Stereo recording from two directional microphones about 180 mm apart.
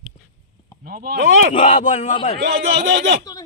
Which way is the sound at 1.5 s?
45° left (ahead or behind).